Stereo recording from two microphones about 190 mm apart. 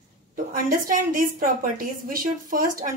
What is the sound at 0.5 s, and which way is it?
A woman's voice, 45° right (ahead or behind).